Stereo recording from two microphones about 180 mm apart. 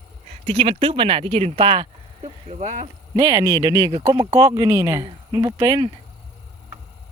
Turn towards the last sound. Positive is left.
turn(degrees=-20)  # may be behind; listen again after turning